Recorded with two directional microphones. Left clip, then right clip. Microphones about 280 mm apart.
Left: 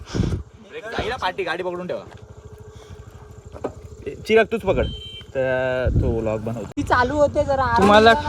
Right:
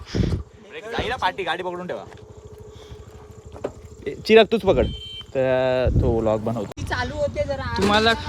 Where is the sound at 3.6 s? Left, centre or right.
Centre.